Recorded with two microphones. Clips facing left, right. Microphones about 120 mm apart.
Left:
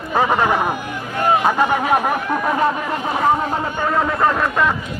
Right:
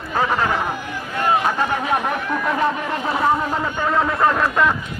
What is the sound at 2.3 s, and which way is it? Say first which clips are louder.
Speech: left 2 dB; 30° left (ahead or behind).